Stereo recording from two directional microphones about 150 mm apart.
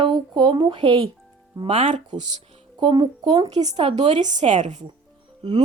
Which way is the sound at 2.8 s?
30° right (ahead or behind).